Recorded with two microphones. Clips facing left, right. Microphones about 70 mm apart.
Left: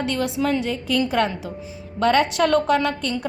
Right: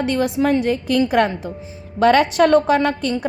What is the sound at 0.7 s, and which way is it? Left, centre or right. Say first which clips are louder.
A woman's voice: right 5 dB; right.